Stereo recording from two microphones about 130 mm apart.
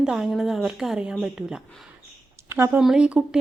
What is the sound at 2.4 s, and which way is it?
Speech, 20° right (ahead or behind).